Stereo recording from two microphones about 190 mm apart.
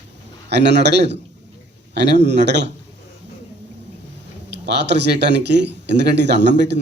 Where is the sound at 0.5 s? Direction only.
65° right (ahead or behind).